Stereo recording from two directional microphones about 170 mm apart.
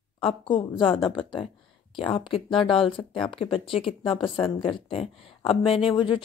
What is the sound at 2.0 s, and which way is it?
Speech, 30° left (ahead or behind).